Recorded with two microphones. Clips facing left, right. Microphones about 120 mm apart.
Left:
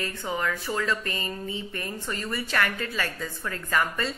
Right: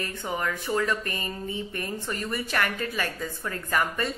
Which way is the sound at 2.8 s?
20° right (ahead or behind).